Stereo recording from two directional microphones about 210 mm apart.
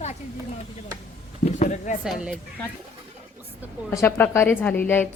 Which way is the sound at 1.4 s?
35° left (ahead or behind).